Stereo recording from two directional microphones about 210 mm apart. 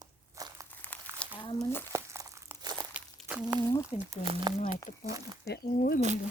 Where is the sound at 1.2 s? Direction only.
5° left (ahead or behind).